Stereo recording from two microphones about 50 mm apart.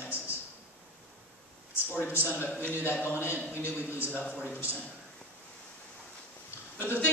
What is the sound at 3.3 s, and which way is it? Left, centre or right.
Speech, right.